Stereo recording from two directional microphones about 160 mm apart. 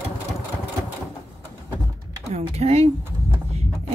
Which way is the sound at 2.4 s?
40° right (ahead or behind).